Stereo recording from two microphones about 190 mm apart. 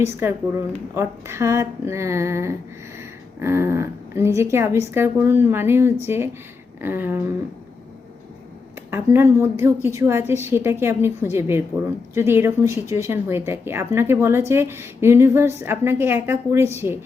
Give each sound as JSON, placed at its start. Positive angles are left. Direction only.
{"t": 0.0, "sound": "speech", "side_deg": -10}
{"t": 8.9, "sound": "speech", "side_deg": -15}